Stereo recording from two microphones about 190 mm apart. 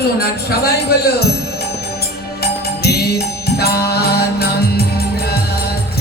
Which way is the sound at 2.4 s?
55° left (ahead or behind).